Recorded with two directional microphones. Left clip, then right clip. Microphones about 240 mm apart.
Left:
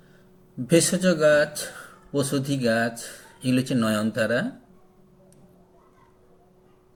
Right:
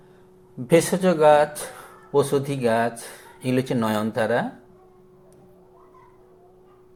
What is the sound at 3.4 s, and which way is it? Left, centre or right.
Speech, right.